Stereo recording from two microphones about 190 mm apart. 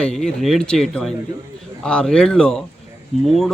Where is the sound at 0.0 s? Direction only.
5° left (ahead or behind).